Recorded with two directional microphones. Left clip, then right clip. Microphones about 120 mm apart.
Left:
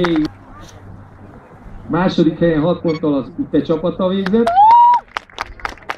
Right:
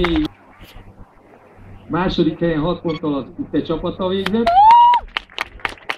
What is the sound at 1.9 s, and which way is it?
A man's voice, 40° left (ahead or behind).